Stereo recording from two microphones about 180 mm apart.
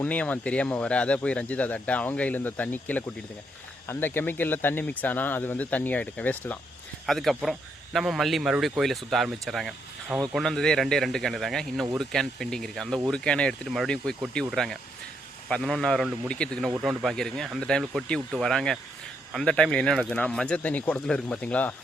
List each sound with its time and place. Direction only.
0.0 s speech: 10° left (ahead or behind)